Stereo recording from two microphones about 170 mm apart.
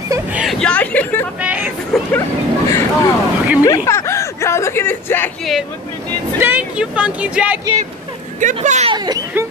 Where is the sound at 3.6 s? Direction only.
20° left (ahead or behind).